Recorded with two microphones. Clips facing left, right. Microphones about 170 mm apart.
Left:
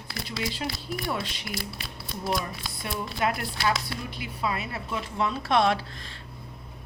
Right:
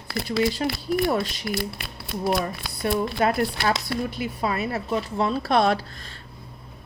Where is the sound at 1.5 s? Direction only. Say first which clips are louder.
Right 7 dB; 60° right (ahead or behind).